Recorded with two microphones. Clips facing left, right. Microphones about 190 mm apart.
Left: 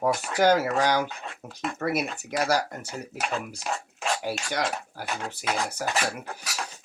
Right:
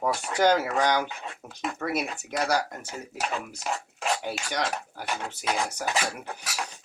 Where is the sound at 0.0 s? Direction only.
10° left (ahead or behind).